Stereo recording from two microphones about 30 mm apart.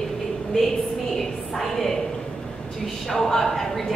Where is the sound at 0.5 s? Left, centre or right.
Left.